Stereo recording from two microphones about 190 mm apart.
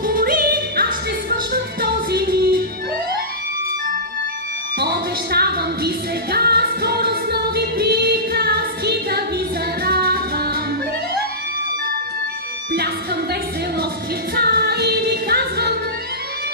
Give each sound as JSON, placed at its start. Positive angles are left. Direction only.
{"t": 0.0, "sound": "music", "side_deg": -50}
{"t": 4.7, "sound": "music", "side_deg": -55}
{"t": 12.7, "sound": "music", "side_deg": -55}